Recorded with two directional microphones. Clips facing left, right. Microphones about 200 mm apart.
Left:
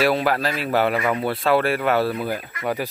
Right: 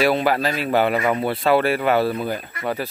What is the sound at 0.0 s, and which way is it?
Speech, centre (ahead or behind).